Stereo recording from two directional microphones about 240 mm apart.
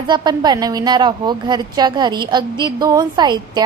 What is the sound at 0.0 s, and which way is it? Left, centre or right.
A woman's voice, centre.